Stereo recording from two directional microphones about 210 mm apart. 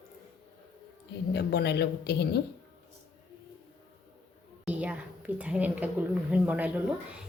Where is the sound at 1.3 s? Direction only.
50° left (ahead or behind).